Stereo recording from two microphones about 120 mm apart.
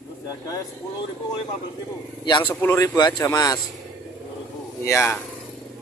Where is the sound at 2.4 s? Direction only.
15° left (ahead or behind).